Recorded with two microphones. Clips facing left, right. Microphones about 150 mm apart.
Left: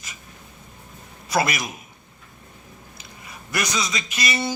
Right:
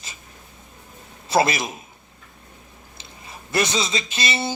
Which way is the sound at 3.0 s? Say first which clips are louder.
Right 3 dB; 30° right (ahead or behind).